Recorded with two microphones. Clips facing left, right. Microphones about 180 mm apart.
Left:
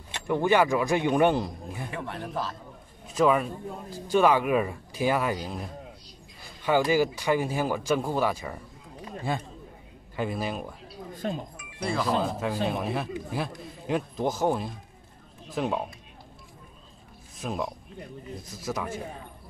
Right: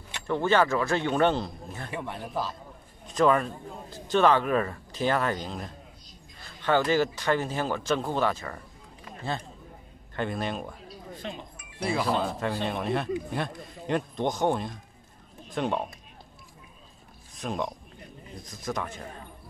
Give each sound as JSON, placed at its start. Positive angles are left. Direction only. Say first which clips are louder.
{"t": 0.3, "sound": "a man's voice", "louder": "left 1 dB", "side_deg": 15}
{"t": 1.9, "sound": "a man's voice", "louder": "right 1 dB", "side_deg": -5}
{"t": 11.1, "sound": "speech", "louder": "left 7 dB", "side_deg": 45}
{"t": 11.8, "sound": "speech", "louder": "even", "side_deg": -5}
{"t": 12.2, "sound": "speech", "louder": "left 1 dB", "side_deg": 5}
{"t": 17.4, "sound": "a man's voice", "louder": "even", "side_deg": 5}